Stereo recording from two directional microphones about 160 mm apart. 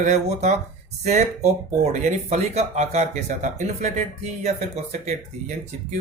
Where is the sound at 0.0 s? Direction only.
45° right (ahead or behind).